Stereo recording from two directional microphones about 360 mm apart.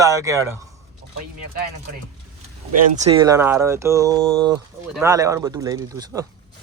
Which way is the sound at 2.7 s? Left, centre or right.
Centre.